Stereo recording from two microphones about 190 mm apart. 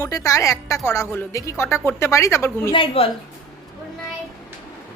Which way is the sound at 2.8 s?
30° left (ahead or behind).